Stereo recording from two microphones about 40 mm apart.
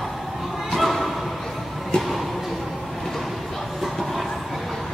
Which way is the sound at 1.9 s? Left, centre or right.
Left.